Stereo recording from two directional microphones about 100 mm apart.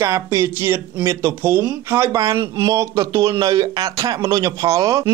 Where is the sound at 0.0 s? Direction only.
30° right (ahead or behind).